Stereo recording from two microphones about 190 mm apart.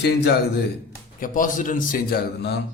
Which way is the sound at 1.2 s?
45° left (ahead or behind).